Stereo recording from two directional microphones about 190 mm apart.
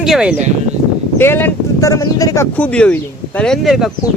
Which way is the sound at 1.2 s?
10° left (ahead or behind).